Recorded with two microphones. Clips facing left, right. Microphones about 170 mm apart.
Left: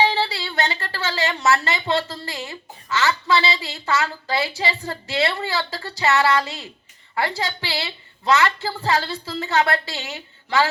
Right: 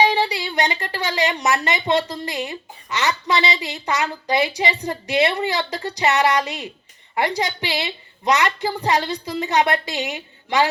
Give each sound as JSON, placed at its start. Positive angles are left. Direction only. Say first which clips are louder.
{"t": 0.0, "sound": "a woman's voice", "louder": "right 2 dB", "side_deg": -15}